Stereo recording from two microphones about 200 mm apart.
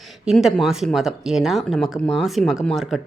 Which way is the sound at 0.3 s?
Centre (ahead or behind).